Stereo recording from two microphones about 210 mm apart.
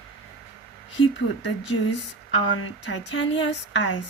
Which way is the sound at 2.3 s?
65° left (ahead or behind).